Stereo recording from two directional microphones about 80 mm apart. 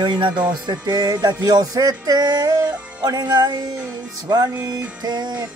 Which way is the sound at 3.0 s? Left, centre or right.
Right.